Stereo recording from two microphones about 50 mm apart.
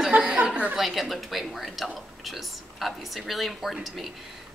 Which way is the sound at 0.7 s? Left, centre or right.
Centre.